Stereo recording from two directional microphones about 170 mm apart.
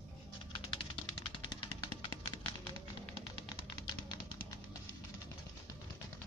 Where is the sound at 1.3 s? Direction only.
25° left (ahead or behind).